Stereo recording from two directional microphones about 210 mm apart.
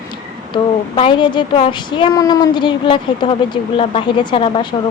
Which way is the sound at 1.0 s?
20° left (ahead or behind).